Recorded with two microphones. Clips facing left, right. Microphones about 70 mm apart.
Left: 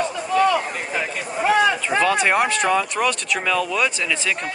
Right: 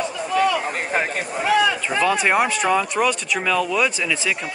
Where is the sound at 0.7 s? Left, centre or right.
Right.